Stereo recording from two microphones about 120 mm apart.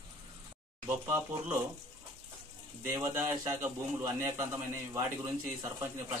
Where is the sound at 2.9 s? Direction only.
25° right (ahead or behind).